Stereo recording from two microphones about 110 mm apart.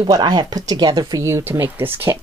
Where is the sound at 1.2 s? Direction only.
25° right (ahead or behind).